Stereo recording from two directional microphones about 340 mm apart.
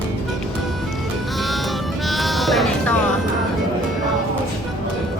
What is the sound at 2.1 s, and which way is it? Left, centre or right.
Sheep, centre.